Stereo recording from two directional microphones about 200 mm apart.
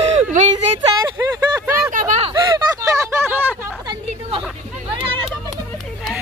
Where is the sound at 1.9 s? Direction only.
40° right (ahead or behind).